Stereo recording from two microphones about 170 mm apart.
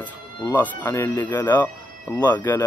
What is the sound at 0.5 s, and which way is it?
Speech, 15° left (ahead or behind).